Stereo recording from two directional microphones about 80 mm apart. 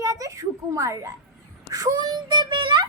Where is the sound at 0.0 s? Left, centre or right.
Right.